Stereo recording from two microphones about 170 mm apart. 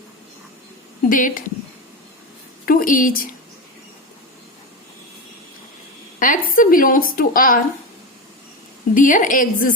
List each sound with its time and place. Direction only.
1.1 s a woman's voice: 50° left (ahead or behind)
2.6 s a woman's voice: 55° left (ahead or behind)
6.1 s a woman's voice: 50° left (ahead or behind)
9.0 s a woman's voice: 50° left (ahead or behind)